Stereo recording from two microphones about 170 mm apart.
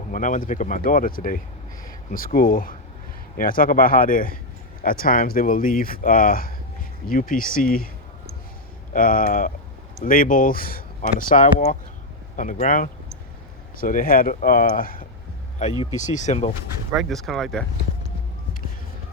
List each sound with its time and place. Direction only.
0.1 s speech: 50° left (ahead or behind)
8.9 s speech: 55° left (ahead or behind)
16.9 s speech: centre (ahead or behind)